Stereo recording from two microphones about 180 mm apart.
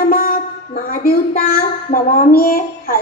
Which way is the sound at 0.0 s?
55° left (ahead or behind).